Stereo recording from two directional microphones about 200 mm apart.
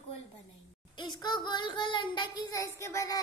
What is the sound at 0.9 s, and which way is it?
A child's voice, 20° left (ahead or behind).